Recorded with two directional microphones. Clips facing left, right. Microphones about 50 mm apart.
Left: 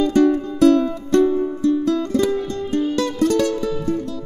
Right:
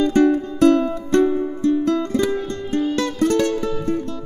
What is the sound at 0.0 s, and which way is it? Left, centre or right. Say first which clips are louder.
Music: even; right.